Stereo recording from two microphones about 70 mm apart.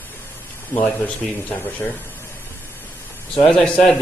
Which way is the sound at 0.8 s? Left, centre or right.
Centre.